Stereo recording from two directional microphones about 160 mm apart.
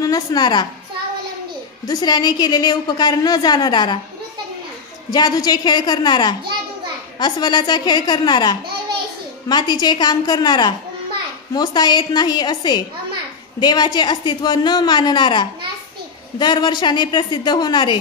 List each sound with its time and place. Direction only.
0.0 s a woman's voice: 25° left (ahead or behind)
1.9 s a woman's voice: 25° left (ahead or behind)
5.1 s a woman's voice: 25° left (ahead or behind)